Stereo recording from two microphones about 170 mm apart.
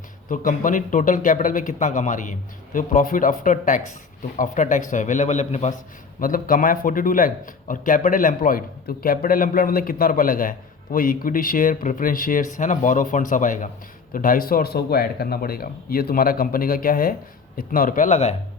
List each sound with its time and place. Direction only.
0.3 s speech: 50° left (ahead or behind)
6.1 s a man's voice: 55° left (ahead or behind)